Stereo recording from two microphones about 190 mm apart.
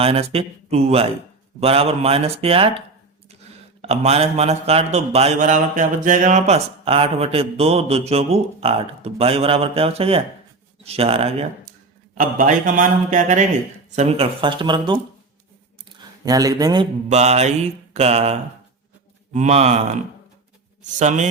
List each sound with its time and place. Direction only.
0.0 s a man's voice: 30° right (ahead or behind)
3.8 s a man's voice: 35° right (ahead or behind)
12.1 s a man's voice: 45° right (ahead or behind); by 14.9 s 25° right (ahead or behind)
15.9 s a sound: 20° right (ahead or behind)
17.1 s a man's voice: 35° right (ahead or behind)
21.0 s a man's voice: 40° right (ahead or behind)